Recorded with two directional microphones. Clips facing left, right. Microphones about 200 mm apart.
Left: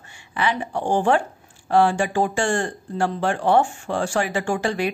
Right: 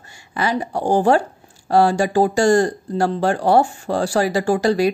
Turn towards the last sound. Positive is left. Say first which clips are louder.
# right 6 dB
turn(degrees=-40)  # may be behind; listen again after turning